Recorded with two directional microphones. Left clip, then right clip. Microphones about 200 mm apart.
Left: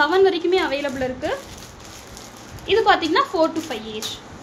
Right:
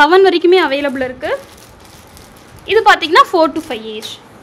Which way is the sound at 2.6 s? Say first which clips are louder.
Right 7 dB; 60° right (ahead or behind).